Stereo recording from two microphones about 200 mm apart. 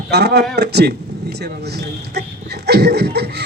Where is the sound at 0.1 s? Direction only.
55° right (ahead or behind).